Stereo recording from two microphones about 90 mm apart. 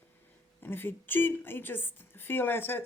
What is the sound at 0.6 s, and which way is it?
A woman's voice, 25° left (ahead or behind).